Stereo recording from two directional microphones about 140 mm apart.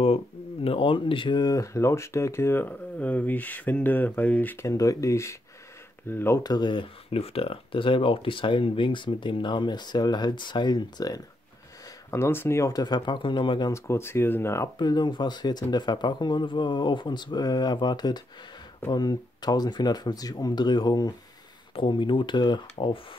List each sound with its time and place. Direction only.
0.7 s speech: 40° left (ahead or behind)
12.1 s speech: 15° left (ahead or behind); by 13.7 s 35° left (ahead or behind)
13.7 s speech: 20° left (ahead or behind)
14.8 s speech: 30° left (ahead or behind)